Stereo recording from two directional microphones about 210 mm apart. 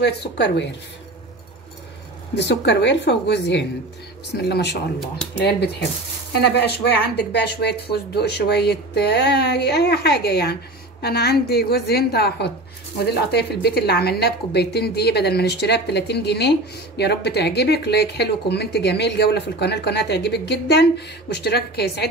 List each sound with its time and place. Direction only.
0.0 s speech: 55° left (ahead or behind)
2.3 s a woman's voice: 55° left (ahead or behind)